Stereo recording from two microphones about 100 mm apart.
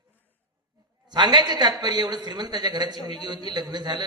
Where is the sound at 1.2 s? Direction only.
45° right (ahead or behind).